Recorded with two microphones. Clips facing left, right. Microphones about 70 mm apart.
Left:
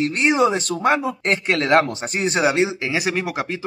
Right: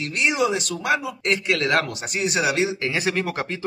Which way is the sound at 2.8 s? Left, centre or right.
Centre.